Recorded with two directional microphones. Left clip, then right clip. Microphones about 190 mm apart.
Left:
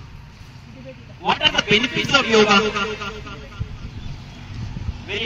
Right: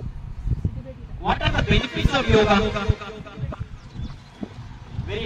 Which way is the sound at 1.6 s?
40° right (ahead or behind).